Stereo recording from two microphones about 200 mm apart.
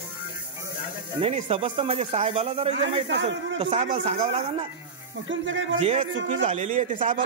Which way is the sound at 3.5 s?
35° right (ahead or behind).